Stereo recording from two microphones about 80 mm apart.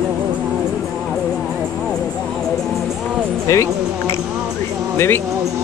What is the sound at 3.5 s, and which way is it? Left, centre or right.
Speech, left.